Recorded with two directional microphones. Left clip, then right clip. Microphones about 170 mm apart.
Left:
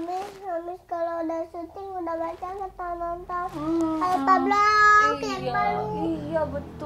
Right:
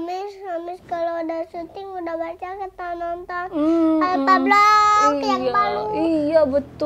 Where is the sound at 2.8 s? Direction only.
25° right (ahead or behind).